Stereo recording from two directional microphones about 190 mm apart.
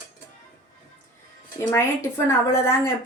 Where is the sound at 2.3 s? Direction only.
10° left (ahead or behind).